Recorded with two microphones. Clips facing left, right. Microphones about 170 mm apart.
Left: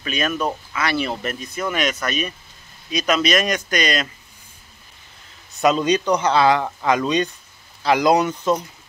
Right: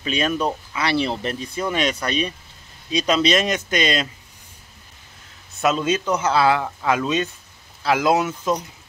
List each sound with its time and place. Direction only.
0.0 s speech: 30° right (ahead or behind)
5.6 s speech: centre (ahead or behind)